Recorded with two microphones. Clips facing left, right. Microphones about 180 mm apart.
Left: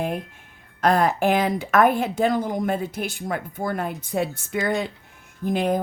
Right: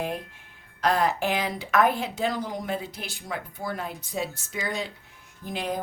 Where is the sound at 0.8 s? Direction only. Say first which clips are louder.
Left 4 dB; 50° left (ahead or behind).